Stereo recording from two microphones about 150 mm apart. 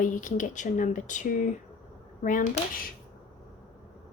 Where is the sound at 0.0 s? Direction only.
60° left (ahead or behind).